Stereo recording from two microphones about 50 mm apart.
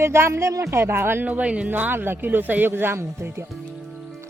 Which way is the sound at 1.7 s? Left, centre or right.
Right.